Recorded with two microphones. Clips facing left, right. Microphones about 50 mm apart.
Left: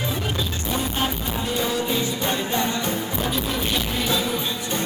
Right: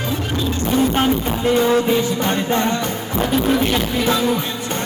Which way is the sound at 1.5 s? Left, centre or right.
Right.